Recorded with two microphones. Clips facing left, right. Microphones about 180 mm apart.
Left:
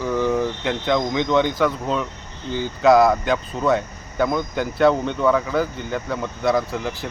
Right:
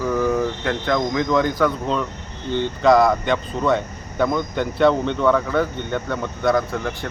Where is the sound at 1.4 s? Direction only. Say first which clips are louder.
Right 1 dB; centre (ahead or behind).